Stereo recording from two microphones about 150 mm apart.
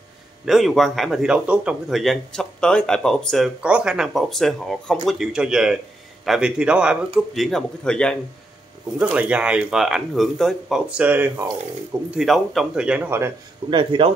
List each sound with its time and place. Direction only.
0.5 s speech: centre (ahead or behind)
8.9 s speech: 10° right (ahead or behind)
13.7 s speech: 35° right (ahead or behind)